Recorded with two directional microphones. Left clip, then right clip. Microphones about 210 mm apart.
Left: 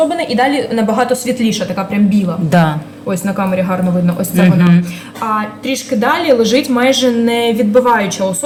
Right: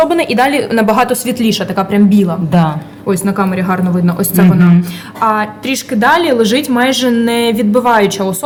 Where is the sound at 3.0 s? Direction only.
30° right (ahead or behind).